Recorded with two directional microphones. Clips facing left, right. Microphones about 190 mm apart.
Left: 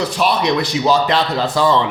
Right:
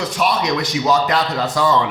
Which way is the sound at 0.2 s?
30° left (ahead or behind).